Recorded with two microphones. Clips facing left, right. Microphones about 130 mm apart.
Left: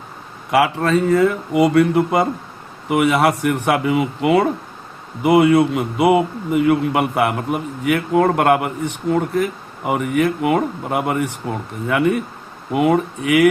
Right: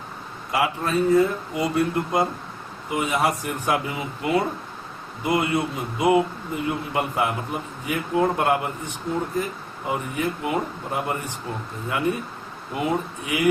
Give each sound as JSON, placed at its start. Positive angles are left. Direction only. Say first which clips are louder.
{"t": 0.5, "sound": "a man's voice", "louder": "left 7 dB", "side_deg": 75}